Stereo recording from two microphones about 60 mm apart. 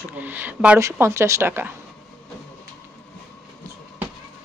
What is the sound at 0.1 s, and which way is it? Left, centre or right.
Speech, right.